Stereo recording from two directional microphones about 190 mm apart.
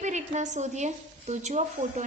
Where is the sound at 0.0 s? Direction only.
40° right (ahead or behind).